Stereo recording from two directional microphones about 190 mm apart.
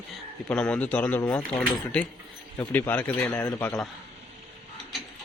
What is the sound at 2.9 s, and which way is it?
A man's voice, 10° left (ahead or behind).